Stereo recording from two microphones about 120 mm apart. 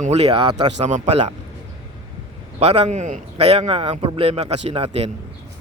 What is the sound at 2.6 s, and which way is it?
A man's voice, 60° right (ahead or behind).